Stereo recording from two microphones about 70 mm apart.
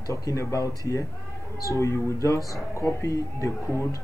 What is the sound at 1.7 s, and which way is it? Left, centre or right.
Speech, left.